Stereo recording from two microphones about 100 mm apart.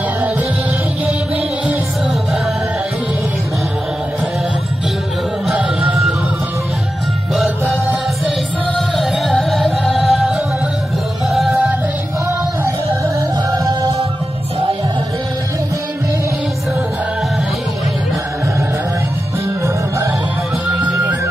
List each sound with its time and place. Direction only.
8.9 s music: centre (ahead or behind)
11.3 s music: 5° right (ahead or behind)
13.5 s music: 40° right (ahead or behind)